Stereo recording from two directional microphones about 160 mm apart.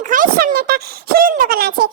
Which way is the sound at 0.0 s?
55° right (ahead or behind).